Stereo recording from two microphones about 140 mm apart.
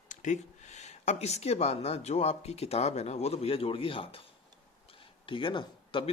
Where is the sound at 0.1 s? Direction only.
60° left (ahead or behind); by 4.2 s 40° left (ahead or behind).